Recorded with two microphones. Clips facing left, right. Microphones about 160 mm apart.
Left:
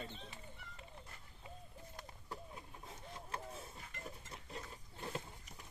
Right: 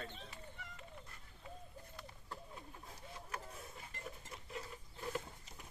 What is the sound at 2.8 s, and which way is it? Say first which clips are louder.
Printer: left 2 dB; 30° left (ahead or behind).